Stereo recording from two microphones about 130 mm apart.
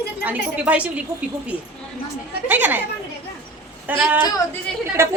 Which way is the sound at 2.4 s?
15° right (ahead or behind).